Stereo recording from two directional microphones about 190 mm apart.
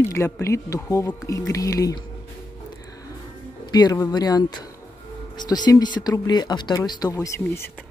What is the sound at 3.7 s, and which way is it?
Speech, 20° left (ahead or behind).